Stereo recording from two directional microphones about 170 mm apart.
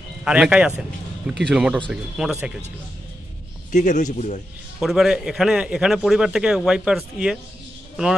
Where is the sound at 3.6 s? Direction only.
45° left (ahead or behind).